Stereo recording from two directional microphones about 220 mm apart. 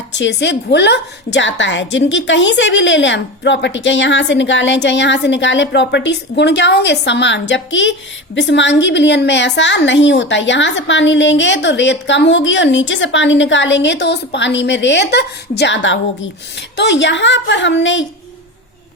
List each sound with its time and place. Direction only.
0.1 s a woman's voice: 55° left (ahead or behind)